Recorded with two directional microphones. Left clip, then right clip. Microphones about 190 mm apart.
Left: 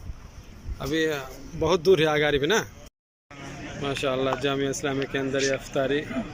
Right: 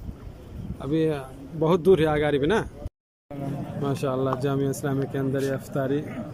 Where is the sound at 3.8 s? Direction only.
10° right (ahead or behind).